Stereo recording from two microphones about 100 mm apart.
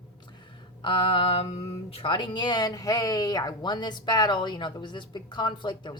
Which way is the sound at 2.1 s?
50° left (ahead or behind).